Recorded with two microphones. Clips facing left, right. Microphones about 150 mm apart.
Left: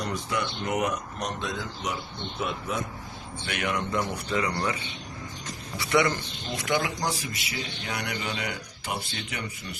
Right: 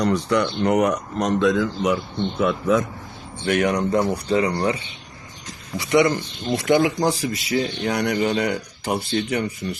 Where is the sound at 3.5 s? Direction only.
45° right (ahead or behind).